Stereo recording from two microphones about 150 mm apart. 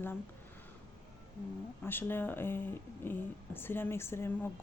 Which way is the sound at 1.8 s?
15° left (ahead or behind).